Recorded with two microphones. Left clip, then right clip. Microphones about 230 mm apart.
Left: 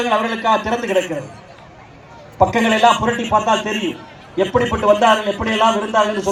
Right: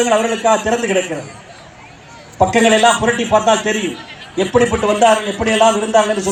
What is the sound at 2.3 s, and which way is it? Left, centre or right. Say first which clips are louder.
A man's voice: right 3 dB; right.